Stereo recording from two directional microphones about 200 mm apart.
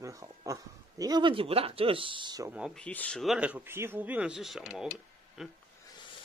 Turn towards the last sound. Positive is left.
turn(degrees=0)  # may be behind; listen again after turning